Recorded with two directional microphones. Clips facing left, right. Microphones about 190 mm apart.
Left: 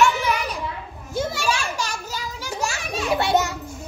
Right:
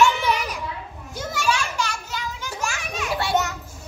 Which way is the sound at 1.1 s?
30° left (ahead or behind).